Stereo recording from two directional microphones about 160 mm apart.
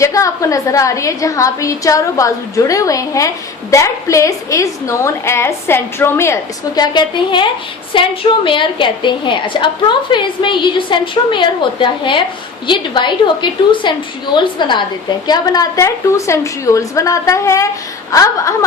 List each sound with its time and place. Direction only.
0.0 s a woman's voice: 20° left (ahead or behind)